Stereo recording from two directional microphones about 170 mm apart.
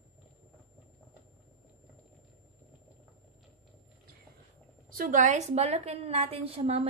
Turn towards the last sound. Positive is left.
turn(degrees=-35)  # may be behind; listen again after turning